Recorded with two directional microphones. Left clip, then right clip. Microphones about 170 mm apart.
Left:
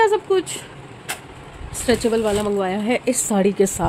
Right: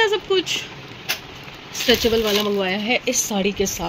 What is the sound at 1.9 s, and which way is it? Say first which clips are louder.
Speech: right 1 dB; 5° left (ahead or behind).